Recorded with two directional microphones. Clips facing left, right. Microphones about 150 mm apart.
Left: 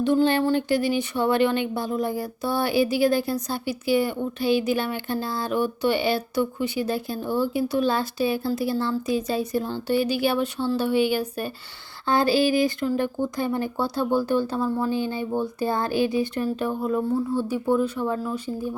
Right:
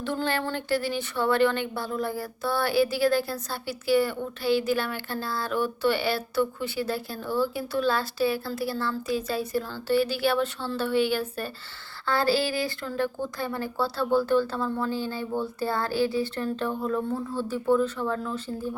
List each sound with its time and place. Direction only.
0.0 s speech: 15° left (ahead or behind)